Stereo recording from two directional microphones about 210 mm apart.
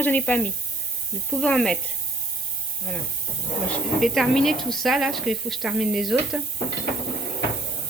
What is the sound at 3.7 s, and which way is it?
Dishes, centre (ahead or behind).